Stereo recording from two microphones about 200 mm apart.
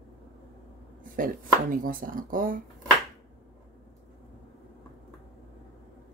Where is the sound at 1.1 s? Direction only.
45° right (ahead or behind).